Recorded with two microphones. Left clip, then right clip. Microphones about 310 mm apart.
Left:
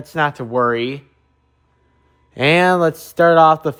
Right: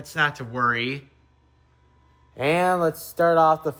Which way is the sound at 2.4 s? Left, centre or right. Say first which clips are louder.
Left 7 dB; left.